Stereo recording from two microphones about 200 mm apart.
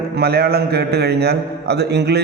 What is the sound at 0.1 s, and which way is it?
A man's voice, 50° right (ahead or behind).